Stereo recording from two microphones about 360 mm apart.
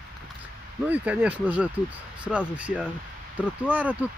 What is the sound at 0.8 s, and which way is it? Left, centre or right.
Speech, centre.